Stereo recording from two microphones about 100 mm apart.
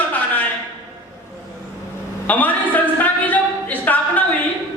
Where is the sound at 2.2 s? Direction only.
15° left (ahead or behind).